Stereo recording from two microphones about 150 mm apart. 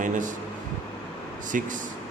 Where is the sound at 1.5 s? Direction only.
60° right (ahead or behind).